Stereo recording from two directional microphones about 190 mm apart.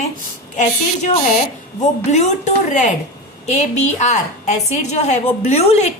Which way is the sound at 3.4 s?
35° left (ahead or behind).